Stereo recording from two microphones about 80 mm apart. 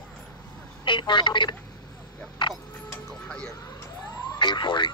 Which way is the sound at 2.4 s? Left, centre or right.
Left.